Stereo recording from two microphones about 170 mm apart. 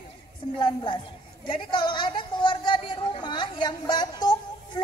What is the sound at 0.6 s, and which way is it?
A woman's voice, 30° left (ahead or behind).